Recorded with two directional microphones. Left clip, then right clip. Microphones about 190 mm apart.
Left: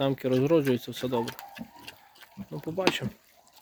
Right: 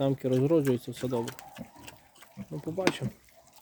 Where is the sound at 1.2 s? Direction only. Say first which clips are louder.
Left 3 dB; 30° right (ahead or behind).